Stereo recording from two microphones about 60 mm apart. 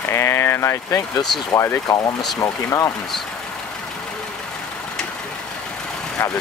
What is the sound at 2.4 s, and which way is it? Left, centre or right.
Speech, left.